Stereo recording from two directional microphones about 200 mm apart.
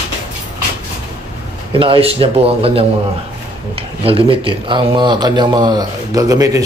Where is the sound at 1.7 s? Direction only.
25° right (ahead or behind).